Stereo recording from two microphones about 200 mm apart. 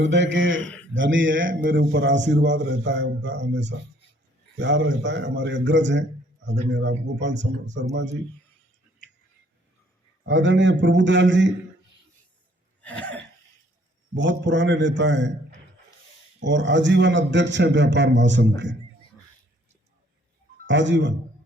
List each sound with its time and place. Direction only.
0.0 s a man's voice: 65° right (ahead or behind)
0.6 s a man's voice: 5° left (ahead or behind)
0.9 s a man's voice: 70° right (ahead or behind)
1.5 s a man's voice: 55° right (ahead or behind)
10.2 s a man's voice: 65° right (ahead or behind)
12.8 s gasp: 5° left (ahead or behind)
14.2 s a man's voice: 65° right (ahead or behind)
20.7 s a man's voice: 65° right (ahead or behind)